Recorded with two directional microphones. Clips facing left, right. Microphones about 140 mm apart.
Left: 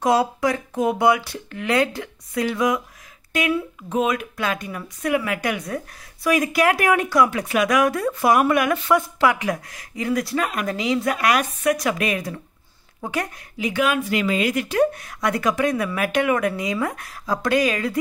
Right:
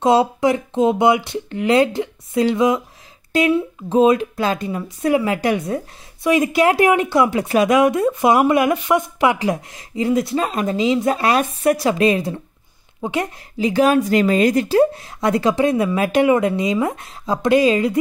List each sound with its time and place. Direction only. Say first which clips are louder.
0.0 s a woman's voice: right 4 dB; 25° right (ahead or behind)